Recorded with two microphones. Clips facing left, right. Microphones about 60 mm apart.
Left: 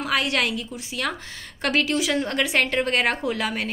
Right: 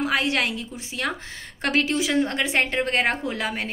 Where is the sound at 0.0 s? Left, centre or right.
Right.